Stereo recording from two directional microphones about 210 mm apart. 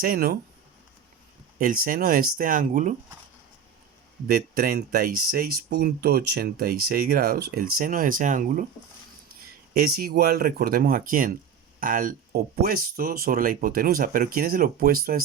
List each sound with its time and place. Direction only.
0.0 s speech: 45° right (ahead or behind)
1.5 s speech: 40° right (ahead or behind)
4.3 s speech: 45° right (ahead or behind)